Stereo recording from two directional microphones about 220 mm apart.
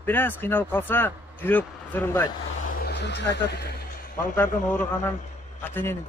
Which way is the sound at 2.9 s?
50° left (ahead or behind).